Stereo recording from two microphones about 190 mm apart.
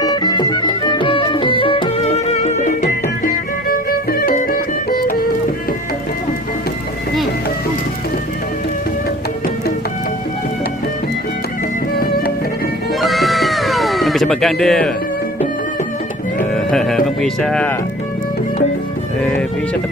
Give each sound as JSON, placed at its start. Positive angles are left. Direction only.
{"t": 0.0, "sound": "music", "side_deg": 20}
{"t": 3.6, "sound": "music", "side_deg": 50}
{"t": 13.0, "sound": "cat", "side_deg": 0}
{"t": 16.5, "sound": "speech", "side_deg": 0}